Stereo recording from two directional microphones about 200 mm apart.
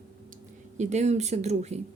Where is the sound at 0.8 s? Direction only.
35° right (ahead or behind).